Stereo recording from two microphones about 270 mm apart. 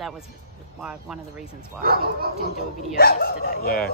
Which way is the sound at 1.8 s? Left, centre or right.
Right.